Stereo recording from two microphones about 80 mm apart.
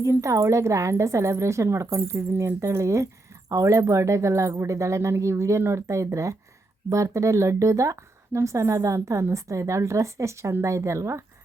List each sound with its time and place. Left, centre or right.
0.0 s a woman's voice: right